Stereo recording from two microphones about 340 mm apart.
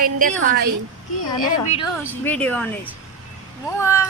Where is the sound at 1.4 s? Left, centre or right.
Left.